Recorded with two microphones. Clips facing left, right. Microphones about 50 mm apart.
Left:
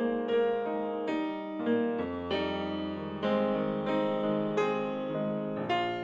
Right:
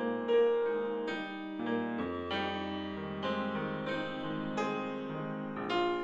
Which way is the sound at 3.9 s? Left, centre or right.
Left.